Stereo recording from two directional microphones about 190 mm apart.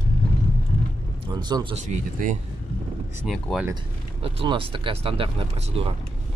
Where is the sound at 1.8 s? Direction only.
40° right (ahead or behind).